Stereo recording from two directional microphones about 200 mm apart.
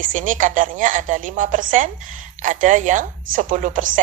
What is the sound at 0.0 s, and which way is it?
A woman's voice, 40° right (ahead or behind).